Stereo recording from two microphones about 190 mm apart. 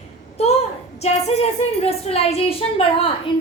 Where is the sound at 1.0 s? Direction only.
35° left (ahead or behind).